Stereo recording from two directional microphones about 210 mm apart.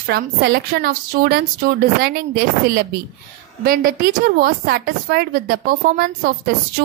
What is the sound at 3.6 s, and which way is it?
A woman's voice, 45° right (ahead or behind).